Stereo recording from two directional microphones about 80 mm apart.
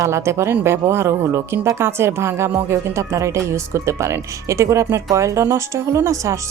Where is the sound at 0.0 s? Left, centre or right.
Right.